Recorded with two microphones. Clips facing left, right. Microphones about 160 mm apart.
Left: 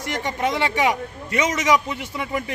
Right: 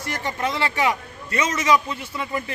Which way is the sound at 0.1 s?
15° left (ahead or behind).